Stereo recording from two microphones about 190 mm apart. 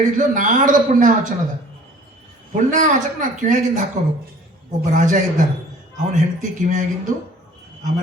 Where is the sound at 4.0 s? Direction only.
40° right (ahead or behind).